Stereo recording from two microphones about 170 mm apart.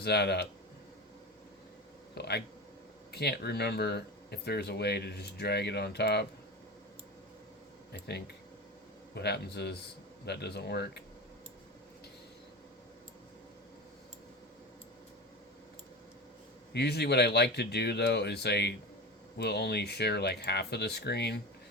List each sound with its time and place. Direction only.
0.0 s speech: 75° left (ahead or behind)
2.1 s speech: 75° left (ahead or behind)
7.9 s speech: 75° left (ahead or behind)
16.7 s speech: 70° left (ahead or behind)